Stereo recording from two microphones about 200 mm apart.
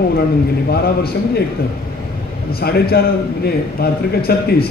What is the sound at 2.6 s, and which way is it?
A man's voice, 50° left (ahead or behind).